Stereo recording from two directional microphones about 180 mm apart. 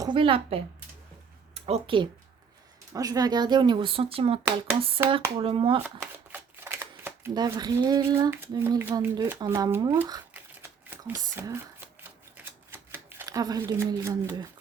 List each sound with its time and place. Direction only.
0.0 s a woman's voice: 25° right (ahead or behind)
2.9 s speech: 20° right (ahead or behind)
5.4 s speech: 30° right (ahead or behind)
6.3 s speech: 10° right (ahead or behind)
12.4 s shuffling cards: 10° right (ahead or behind)